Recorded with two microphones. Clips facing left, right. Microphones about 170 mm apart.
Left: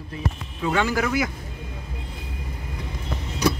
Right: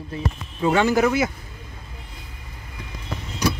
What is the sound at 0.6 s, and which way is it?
Speech, 30° right (ahead or behind).